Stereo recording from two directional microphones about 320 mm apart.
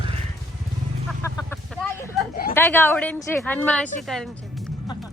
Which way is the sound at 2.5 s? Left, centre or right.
Centre.